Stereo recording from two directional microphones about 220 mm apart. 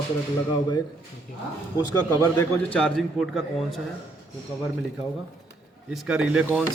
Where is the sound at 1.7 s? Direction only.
15° left (ahead or behind).